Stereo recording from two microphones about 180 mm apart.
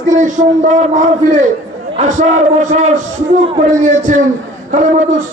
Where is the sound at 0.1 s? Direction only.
45° right (ahead or behind).